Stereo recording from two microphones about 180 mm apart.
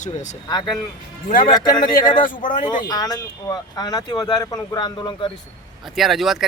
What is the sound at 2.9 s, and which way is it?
Speech, 20° left (ahead or behind).